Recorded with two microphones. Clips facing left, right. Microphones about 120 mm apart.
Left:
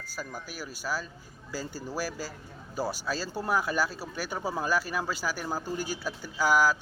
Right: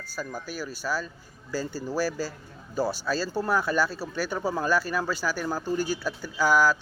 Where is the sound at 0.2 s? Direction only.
10° left (ahead or behind).